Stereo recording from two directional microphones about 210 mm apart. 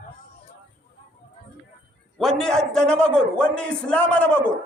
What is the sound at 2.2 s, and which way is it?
A man's voice, centre (ahead or behind).